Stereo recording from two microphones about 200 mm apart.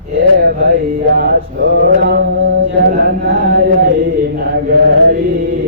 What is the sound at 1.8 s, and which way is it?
Mantra, 55° right (ahead or behind).